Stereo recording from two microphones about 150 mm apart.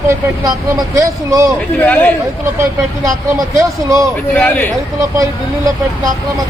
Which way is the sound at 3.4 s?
20° right (ahead or behind).